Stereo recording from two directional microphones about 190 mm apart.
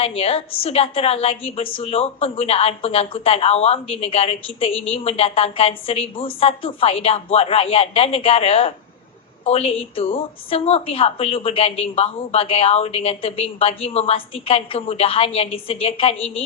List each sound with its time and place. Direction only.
0.2 s a woman's voice: 30° left (ahead or behind)